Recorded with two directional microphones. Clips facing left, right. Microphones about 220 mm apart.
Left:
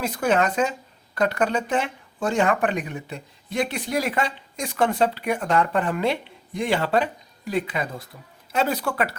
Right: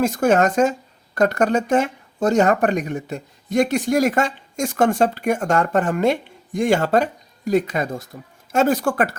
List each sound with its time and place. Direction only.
0.0 s speech: 45° right (ahead or behind)